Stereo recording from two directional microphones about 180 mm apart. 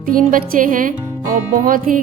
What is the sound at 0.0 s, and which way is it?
A woman's voice, 50° right (ahead or behind).